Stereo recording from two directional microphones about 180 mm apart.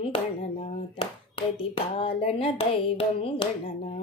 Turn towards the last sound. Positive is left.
turn(degrees=30)  # may be behind; listen again after turning